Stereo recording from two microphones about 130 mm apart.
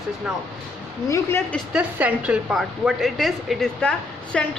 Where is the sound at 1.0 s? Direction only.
25° left (ahead or behind).